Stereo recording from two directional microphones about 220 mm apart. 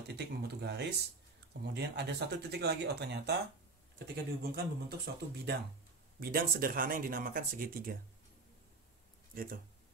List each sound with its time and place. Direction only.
0.1 s speech: 50° right (ahead or behind)
4.4 s speech: 45° right (ahead or behind)
9.3 s speech: 40° right (ahead or behind)